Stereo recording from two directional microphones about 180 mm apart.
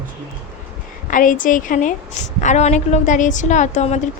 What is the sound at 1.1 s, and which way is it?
A woman's voice, 45° left (ahead or behind).